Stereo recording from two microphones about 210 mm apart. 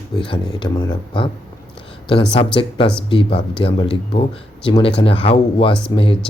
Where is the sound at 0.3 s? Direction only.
25° left (ahead or behind).